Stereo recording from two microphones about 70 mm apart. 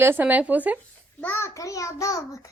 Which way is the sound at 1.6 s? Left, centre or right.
Left.